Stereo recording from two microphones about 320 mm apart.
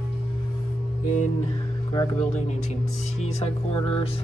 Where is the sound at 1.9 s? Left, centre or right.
Centre.